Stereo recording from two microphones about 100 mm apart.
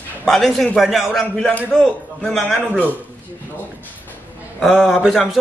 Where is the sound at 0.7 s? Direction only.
5° right (ahead or behind).